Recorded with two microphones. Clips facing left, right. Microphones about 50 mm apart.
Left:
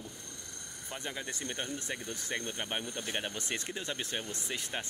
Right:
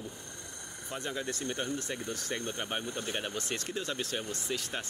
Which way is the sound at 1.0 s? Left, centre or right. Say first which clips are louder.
Right 4 dB; centre.